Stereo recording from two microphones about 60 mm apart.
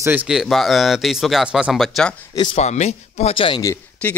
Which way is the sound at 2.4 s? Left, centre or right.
Left.